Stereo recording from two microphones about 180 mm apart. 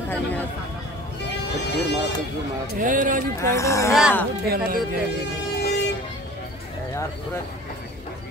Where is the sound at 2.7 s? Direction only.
45° right (ahead or behind).